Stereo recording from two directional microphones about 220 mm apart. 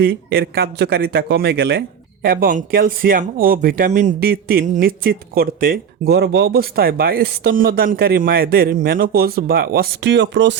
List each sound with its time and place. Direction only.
0.0 s speech: 45° right (ahead or behind)